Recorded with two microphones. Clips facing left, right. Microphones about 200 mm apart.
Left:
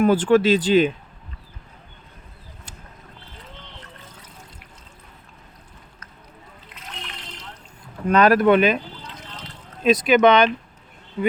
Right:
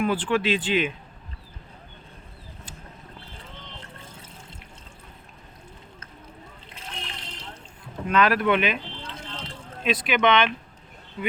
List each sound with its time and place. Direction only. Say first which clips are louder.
0.0 s speech: left 8 dB; 45° left (ahead or behind)
4.1 s water: even; 25° right (ahead or behind)
6.7 s water: even; 30° right (ahead or behind)
8.0 s speech: left 6 dB; 40° left (ahead or behind)
9.0 s vehicle: right 2 dB; 30° right (ahead or behind)
9.8 s speech: left 8 dB; 40° left (ahead or behind)